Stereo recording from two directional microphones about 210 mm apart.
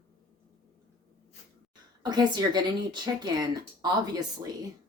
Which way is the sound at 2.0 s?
20° right (ahead or behind).